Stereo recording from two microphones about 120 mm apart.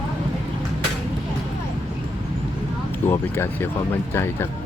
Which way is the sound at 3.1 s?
20° left (ahead or behind).